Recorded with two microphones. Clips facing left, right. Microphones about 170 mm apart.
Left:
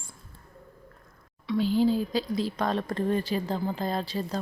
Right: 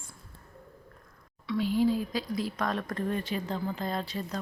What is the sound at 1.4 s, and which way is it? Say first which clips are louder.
Speech: left 3 dB; 30° left (ahead or behind).